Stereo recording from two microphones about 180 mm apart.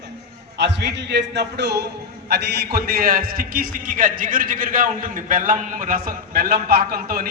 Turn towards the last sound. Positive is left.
turn(degrees=-55)  # may be behind; listen again after turning